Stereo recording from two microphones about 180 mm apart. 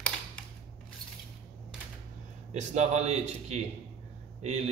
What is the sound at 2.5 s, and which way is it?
A man's voice, 40° right (ahead or behind).